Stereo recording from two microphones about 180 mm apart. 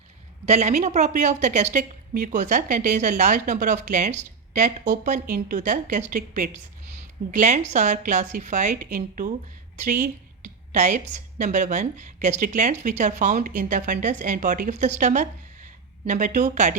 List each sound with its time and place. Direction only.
0.4 s a woman's voice: 40° right (ahead or behind)